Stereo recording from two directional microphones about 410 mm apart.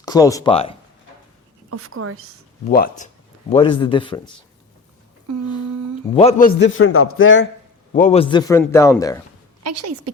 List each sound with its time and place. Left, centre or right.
0.0 s a man's voice: centre
1.7 s speech: right
2.6 s a man's voice: left
6.1 s a man's voice: centre
7.9 s a man's voice: centre
9.6 s speech: right